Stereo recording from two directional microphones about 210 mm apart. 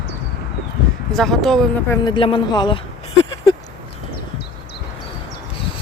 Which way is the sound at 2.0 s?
25° left (ahead or behind).